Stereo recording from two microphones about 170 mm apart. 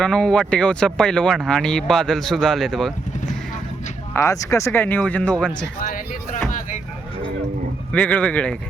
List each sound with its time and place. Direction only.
0.0 s speech: 5° left (ahead or behind)
4.1 s speech: 20° left (ahead or behind)
5.8 s speech: 45° left (ahead or behind)
7.9 s speech: 10° left (ahead or behind)